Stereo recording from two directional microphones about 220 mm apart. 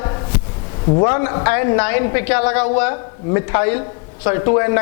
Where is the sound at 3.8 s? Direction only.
30° left (ahead or behind).